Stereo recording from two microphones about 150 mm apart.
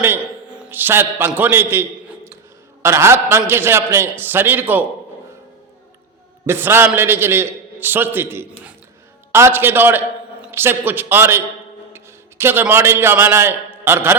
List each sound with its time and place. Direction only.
0.6 s a man's voice: 15° right (ahead or behind)
6.4 s a man's voice: 15° right (ahead or behind)